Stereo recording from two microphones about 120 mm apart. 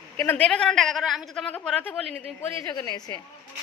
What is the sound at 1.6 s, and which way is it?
Speech, 15° left (ahead or behind).